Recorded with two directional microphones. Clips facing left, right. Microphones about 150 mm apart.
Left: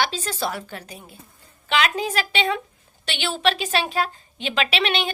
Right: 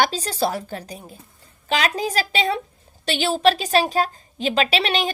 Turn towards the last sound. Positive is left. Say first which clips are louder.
# right 2 dB
turn(degrees=-35)  # may be behind; listen again after turning